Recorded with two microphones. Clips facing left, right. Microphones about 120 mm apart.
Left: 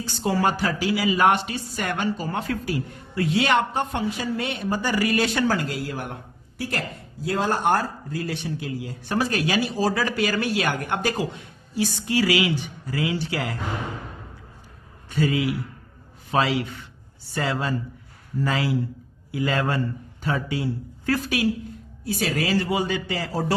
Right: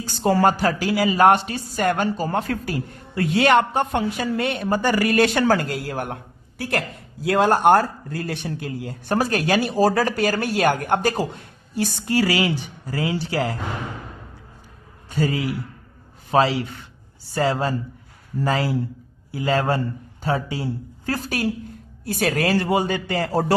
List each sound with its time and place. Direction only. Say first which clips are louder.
0.2 s speech: right 5 dB; 45° right (ahead or behind)
15.1 s a man's voice: even; 40° right (ahead or behind)
22.0 s a man's voice: right 4 dB; 55° right (ahead or behind)